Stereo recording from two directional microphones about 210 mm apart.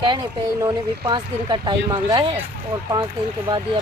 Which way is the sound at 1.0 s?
20° right (ahead or behind).